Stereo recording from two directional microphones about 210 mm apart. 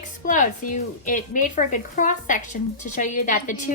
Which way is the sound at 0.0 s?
35° left (ahead or behind).